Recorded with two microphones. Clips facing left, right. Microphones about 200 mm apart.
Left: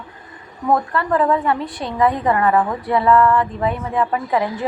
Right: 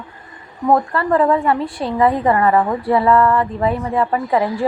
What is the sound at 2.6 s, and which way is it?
Speech, 30° right (ahead or behind).